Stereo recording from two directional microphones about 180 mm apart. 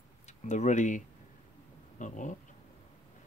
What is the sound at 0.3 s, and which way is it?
Speech, 40° left (ahead or behind).